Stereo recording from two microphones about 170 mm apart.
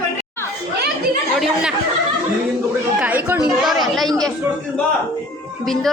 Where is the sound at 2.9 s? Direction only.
10° right (ahead or behind).